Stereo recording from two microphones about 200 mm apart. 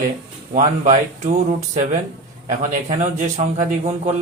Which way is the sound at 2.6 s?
35° right (ahead or behind).